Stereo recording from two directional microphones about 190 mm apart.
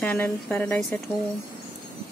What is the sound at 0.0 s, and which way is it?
Speech, 10° left (ahead or behind).